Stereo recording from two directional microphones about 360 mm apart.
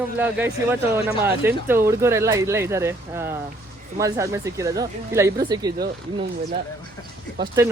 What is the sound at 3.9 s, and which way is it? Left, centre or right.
Speech, centre.